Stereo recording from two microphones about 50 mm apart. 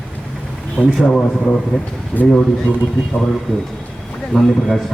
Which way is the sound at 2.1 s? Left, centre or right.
Left.